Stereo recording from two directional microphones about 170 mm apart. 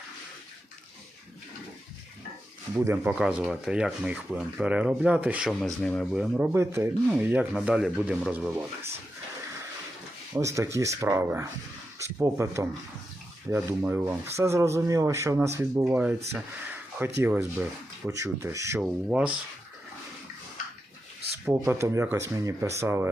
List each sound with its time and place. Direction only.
2.7 s speech: 15° right (ahead or behind); by 6.2 s 5° left (ahead or behind)
6.3 s speech: 10° right (ahead or behind)
10.3 s speech: 20° right (ahead or behind)
17.2 s speech: 10° right (ahead or behind)
18.8 s speech: 5° right (ahead or behind)
21.4 s speech: 15° right (ahead or behind)